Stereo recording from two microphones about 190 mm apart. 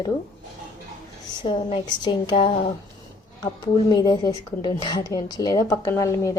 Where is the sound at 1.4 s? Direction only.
25° left (ahead or behind).